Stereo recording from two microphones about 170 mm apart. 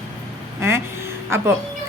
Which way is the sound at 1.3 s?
15° right (ahead or behind).